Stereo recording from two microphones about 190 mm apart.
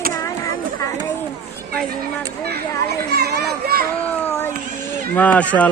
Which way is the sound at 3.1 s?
60° right (ahead or behind).